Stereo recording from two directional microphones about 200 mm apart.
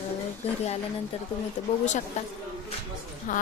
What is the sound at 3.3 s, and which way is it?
Speech, 40° left (ahead or behind).